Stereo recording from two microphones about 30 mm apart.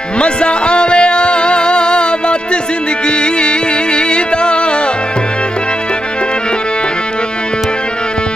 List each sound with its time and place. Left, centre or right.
0.2 s music: left